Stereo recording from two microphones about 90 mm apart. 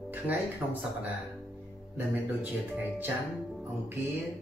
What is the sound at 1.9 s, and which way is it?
Speech, 20° right (ahead or behind).